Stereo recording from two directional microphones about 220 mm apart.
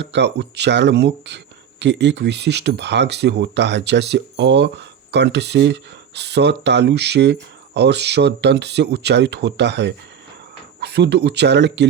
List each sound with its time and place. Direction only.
0.0 s speech: 50° right (ahead or behind)